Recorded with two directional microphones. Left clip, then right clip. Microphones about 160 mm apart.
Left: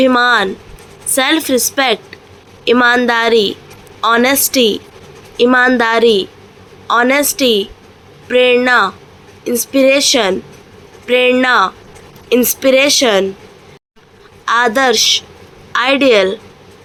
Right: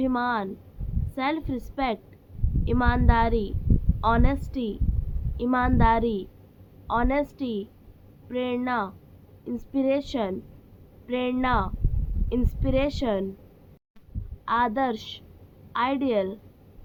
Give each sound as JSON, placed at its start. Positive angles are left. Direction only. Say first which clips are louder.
{"t": 0.0, "sound": "a woman's voice", "louder": "left 16 dB", "side_deg": 20}
{"t": 14.6, "sound": "a woman's voice", "louder": "left 17 dB", "side_deg": 15}